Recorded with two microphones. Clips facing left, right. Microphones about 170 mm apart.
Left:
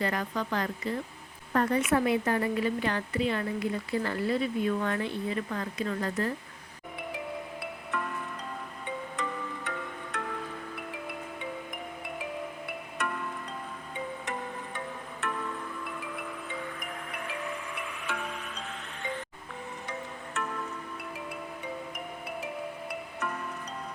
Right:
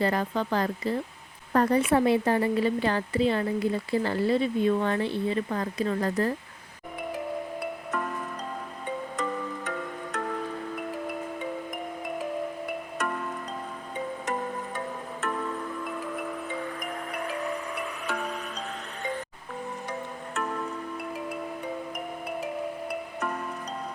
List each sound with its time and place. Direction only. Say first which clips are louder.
0.0 s speech: right 5 dB; 30° right (ahead or behind)
7.6 s music: right 4 dB; 45° right (ahead or behind)
9.6 s music: right 4 dB; 45° right (ahead or behind)
10.8 s marimba: right 6 dB; 45° right (ahead or behind)
12.0 s music: right 6 dB; 45° right (ahead or behind)
15.2 s music: right 3 dB; 45° right (ahead or behind)
19.9 s music: right 3 dB; 40° right (ahead or behind)